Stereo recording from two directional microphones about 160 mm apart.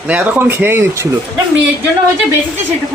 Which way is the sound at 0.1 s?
10° right (ahead or behind).